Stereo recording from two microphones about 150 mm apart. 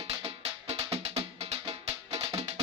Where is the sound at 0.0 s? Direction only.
40° right (ahead or behind).